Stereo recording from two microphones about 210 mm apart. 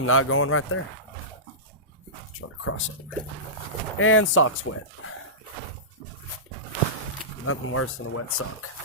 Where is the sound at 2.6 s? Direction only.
70° left (ahead or behind).